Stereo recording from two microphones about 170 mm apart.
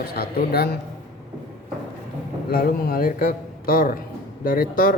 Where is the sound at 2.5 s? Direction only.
55° left (ahead or behind).